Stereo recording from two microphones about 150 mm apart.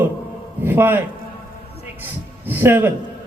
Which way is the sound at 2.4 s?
15° right (ahead or behind).